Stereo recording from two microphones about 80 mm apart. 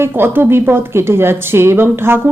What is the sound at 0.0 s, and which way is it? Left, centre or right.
A woman's voice, right.